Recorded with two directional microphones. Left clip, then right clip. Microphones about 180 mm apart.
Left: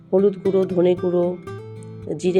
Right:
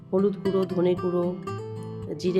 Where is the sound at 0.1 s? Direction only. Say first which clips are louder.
Left 7 dB; 15° left (ahead or behind).